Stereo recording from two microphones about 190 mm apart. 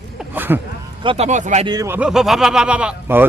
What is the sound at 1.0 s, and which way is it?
Speech, 25° right (ahead or behind).